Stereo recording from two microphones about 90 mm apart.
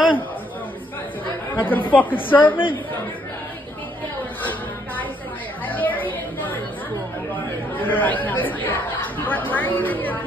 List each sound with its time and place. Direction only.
1.5 s speech: 20° left (ahead or behind)
5.7 s chatter: 20° left (ahead or behind)
7.7 s chatter: 20° left (ahead or behind)